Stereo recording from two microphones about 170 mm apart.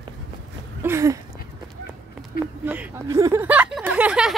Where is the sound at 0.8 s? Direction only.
15° right (ahead or behind).